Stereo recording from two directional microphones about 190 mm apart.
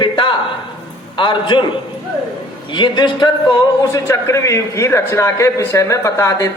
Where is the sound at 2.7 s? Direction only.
25° left (ahead or behind).